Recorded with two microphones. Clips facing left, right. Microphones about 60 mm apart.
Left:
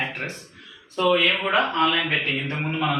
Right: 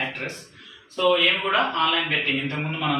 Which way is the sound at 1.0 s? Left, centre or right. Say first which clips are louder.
Even; centre.